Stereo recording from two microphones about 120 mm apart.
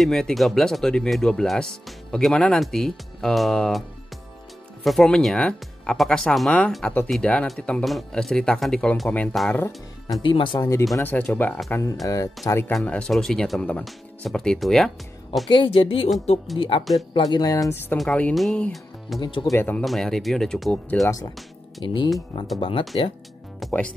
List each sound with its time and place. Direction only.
0.0 s speech: centre (ahead or behind)
4.8 s speech: 5° left (ahead or behind)
10.2 s speech: 45° left (ahead or behind)
11.0 s speech: 15° left (ahead or behind)
11.7 s speech: 25° left (ahead or behind); by 14.9 s centre (ahead or behind)
15.4 s speech: 45° left (ahead or behind)
17.2 s speech: 35° left (ahead or behind)
17.9 s speech: 5° left (ahead or behind)
19.1 s speech: 40° left (ahead or behind)
19.5 s speech: 15° left (ahead or behind)
19.8 s speech: centre (ahead or behind)
21.8 s speech: 45° left (ahead or behind)
23.6 s music: centre (ahead or behind)